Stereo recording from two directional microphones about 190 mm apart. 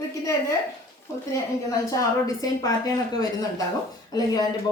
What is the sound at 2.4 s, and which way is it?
A woman's voice, 20° left (ahead or behind).